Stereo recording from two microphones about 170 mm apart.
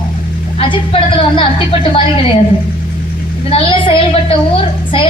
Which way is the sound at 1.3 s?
30° left (ahead or behind).